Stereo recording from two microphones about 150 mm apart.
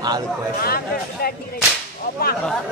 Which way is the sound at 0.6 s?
90° left.